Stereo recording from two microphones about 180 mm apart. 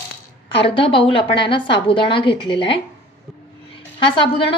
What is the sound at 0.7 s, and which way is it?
A woman's voice, 30° left (ahead or behind).